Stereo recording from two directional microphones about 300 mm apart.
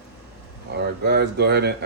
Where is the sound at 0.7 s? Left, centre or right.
Right.